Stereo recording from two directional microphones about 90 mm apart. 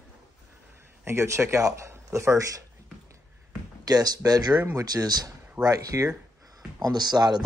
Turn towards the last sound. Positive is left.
turn(degrees=-50)  # may be behind; listen again after turning